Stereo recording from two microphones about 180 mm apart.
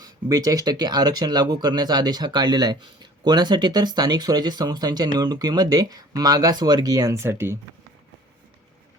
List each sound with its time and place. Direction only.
0.0 s speech: 20° right (ahead or behind)